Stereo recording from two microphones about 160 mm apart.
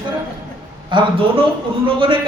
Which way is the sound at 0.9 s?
30° right (ahead or behind).